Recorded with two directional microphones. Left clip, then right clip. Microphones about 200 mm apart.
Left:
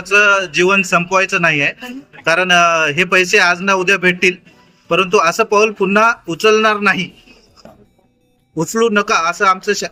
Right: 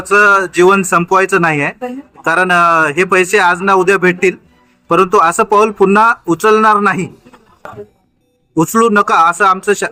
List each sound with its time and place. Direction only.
0.1 s a man's voice: 40° right (ahead or behind)
2.8 s a man's voice: 30° right (ahead or behind)
8.5 s a man's voice: 45° right (ahead or behind)